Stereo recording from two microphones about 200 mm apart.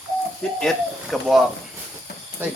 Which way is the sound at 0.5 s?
Centre (ahead or behind).